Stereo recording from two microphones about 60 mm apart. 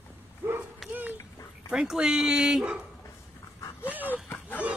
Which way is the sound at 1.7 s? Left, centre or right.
Centre.